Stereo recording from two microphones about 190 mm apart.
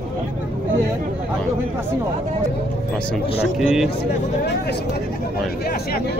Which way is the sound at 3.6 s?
Centre (ahead or behind).